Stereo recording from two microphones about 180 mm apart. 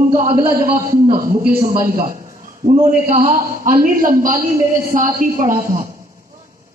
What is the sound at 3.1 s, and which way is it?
A woman's voice, 50° right (ahead or behind).